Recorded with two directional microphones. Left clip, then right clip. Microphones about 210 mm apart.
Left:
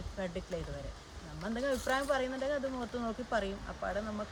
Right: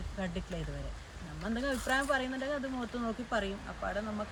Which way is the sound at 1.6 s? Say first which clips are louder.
Even; 15° left (ahead or behind).